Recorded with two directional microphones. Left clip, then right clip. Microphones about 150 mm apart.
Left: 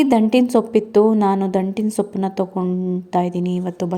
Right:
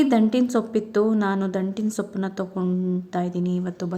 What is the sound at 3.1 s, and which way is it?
Speech, 20° left (ahead or behind).